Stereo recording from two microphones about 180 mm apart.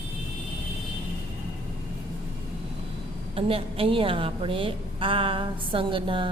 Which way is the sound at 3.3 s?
30° right (ahead or behind).